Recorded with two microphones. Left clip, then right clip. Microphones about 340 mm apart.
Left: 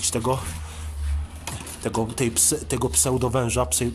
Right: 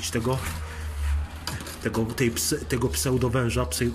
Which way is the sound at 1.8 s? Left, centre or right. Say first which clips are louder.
Left 1 dB; centre.